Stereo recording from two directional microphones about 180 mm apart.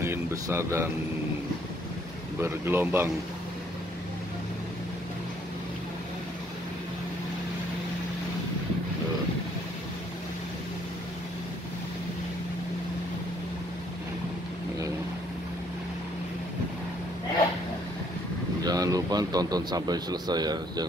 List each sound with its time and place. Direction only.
0.0 s a sound: 15° right (ahead or behind)
2.4 s speech: 10° right (ahead or behind)
18.6 s a man's voice: 20° right (ahead or behind)